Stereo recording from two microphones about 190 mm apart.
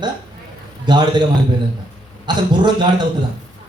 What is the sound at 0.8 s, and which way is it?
Speech, 25° right (ahead or behind).